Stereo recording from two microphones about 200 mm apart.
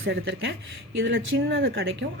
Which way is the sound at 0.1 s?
60° right (ahead or behind).